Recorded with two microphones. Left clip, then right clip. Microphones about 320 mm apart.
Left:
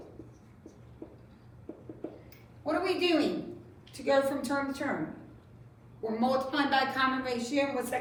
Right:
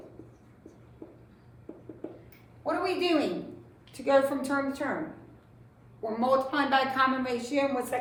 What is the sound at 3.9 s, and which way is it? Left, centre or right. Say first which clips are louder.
Speech: right 3 dB; centre.